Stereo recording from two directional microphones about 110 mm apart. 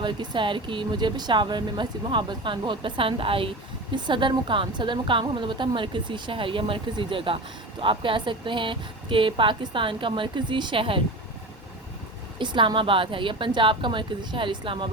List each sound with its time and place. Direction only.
0.0 s a woman's voice: 45° right (ahead or behind)
3.9 s a woman's voice: 45° right (ahead or behind)
12.4 s a woman's voice: 45° right (ahead or behind)